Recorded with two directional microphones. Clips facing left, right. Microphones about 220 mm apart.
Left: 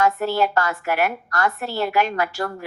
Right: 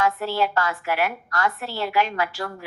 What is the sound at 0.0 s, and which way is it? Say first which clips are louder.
A woman's voice: left 3 dB; 45° left (ahead or behind).